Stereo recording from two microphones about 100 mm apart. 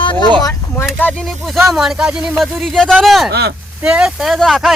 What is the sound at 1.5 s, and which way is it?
Speech, centre (ahead or behind).